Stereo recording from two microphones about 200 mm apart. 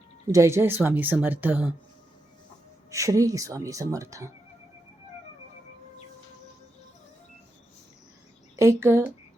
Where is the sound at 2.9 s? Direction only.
15° right (ahead or behind).